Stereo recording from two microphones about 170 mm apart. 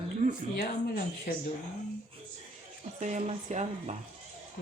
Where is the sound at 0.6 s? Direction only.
55° left (ahead or behind).